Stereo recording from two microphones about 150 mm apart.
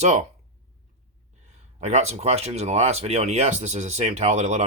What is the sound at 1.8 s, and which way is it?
Speech, 45° right (ahead or behind).